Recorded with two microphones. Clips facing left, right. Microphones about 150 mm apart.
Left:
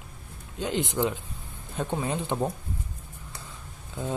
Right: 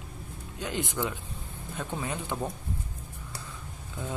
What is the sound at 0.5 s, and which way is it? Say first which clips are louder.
Mantra: left 5 dB; 25° left (ahead or behind).